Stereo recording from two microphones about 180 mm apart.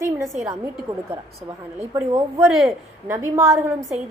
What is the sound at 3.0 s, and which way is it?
Speech, 20° right (ahead or behind).